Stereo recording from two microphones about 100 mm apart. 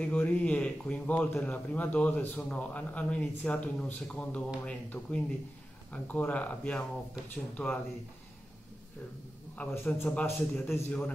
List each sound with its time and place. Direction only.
0.0 s speech: 15° left (ahead or behind)
7.6 s speech: 5° left (ahead or behind)
9.6 s speech: 15° left (ahead or behind)